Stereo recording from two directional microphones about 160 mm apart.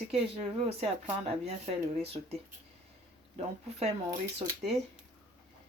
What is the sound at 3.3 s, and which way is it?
Speech, 40° right (ahead or behind).